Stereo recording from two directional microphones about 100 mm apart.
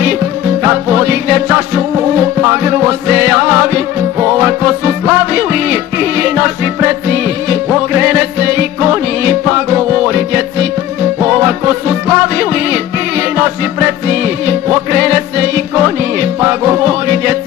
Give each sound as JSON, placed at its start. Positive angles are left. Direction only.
{"t": 0.7, "sound": "music", "side_deg": -20}